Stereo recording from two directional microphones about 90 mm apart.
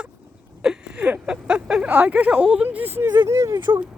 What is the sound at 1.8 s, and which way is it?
Speech, 20° right (ahead or behind).